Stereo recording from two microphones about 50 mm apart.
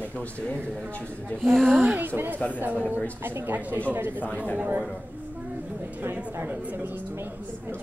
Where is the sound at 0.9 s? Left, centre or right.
Left.